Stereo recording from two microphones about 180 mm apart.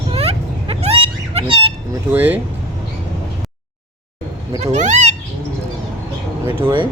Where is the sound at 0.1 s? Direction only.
35° right (ahead or behind).